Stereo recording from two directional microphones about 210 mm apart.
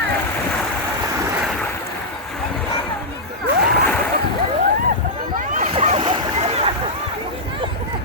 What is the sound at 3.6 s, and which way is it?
Splash, centre (ahead or behind).